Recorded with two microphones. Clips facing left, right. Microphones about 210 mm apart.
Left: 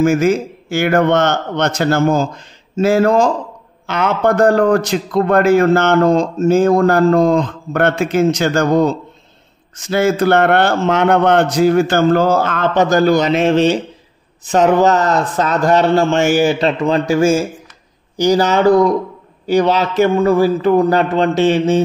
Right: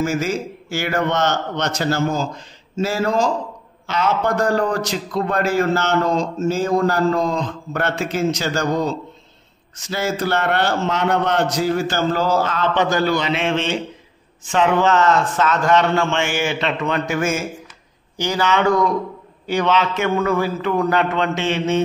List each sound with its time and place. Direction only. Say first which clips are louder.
0.0 s a man's voice: left 8 dB; 55° left (ahead or behind); by 21.8 s 35° left (ahead or behind)